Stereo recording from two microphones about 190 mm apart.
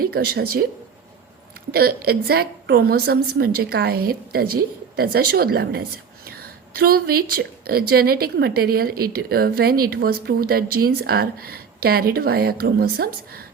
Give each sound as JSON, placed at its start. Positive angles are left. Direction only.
{"t": 0.0, "sound": "a woman's voice", "side_deg": -50}
{"t": 1.7, "sound": "a woman's voice", "side_deg": -55}